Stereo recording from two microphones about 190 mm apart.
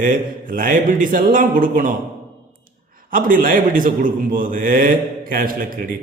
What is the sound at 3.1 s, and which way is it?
A man's voice, 50° right (ahead or behind).